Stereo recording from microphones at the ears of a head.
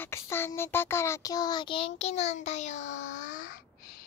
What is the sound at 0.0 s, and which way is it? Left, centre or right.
A child's voice, left.